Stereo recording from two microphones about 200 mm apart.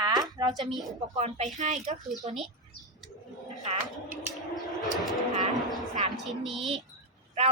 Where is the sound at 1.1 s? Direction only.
35° right (ahead or behind).